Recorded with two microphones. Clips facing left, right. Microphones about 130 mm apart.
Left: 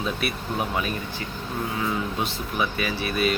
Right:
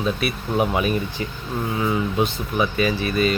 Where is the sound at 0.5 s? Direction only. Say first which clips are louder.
Right 8 dB; 15° right (ahead or behind).